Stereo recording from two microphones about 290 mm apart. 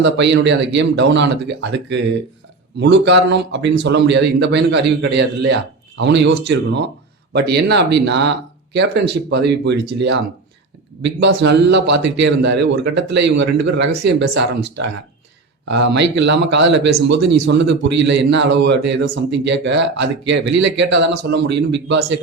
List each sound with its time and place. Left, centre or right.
0.0 s a man's voice: right
11.0 s a man's voice: right
18.6 s speech: right
18.9 s a man's voice: right